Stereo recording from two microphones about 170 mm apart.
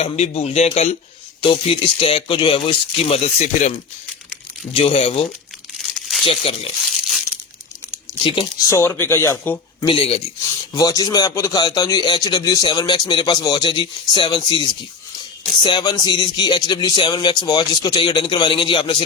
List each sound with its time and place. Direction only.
0.0 s speech: 40° left (ahead or behind)
5.8 s crumpling: centre (ahead or behind)
6.2 s speech: 35° left (ahead or behind)
8.2 s speech: 30° left (ahead or behind)
8.7 s speech: 15° left (ahead or behind)
9.8 s speech: 30° left (ahead or behind)
10.8 s a man's voice: 20° left (ahead or behind)